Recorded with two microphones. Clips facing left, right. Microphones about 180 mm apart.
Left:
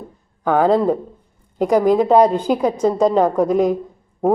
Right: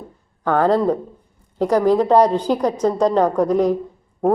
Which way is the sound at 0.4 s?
10° left (ahead or behind).